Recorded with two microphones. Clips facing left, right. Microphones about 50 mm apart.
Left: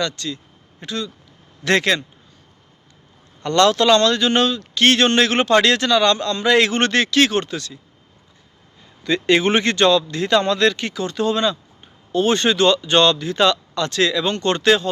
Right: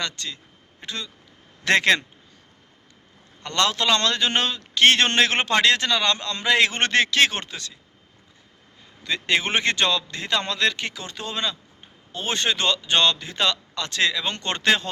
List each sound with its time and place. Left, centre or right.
0.0 s speech: right
3.4 s a man's voice: centre
4.0 s a man's voice: right
9.0 s a man's voice: centre
9.9 s a man's voice: centre
14.5 s speech: right